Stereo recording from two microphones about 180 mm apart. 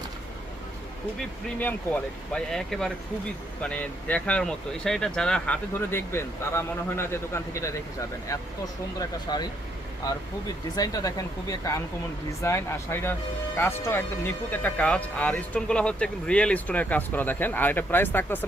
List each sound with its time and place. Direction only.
2.3 s speech: centre (ahead or behind)